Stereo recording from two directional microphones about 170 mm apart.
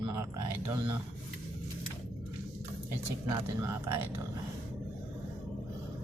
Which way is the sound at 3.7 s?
15° right (ahead or behind).